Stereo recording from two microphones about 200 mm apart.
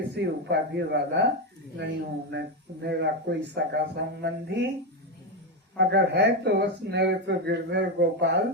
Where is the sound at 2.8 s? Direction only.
60° right (ahead or behind).